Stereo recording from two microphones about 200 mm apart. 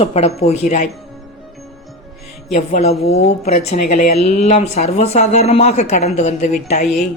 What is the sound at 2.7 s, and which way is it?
Speech, 30° left (ahead or behind).